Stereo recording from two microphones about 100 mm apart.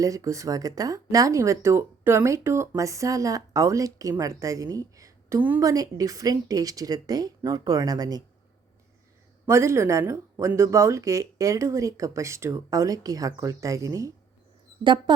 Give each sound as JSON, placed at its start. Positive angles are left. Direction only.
{"t": 0.0, "sound": "speech", "side_deg": -35}
{"t": 9.5, "sound": "speech", "side_deg": -25}